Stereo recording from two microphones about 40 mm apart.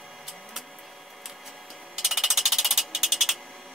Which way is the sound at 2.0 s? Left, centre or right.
Centre.